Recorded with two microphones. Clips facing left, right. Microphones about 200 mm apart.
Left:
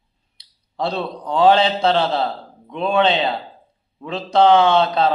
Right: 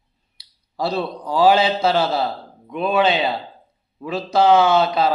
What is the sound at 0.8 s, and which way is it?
A man's voice, 5° right (ahead or behind).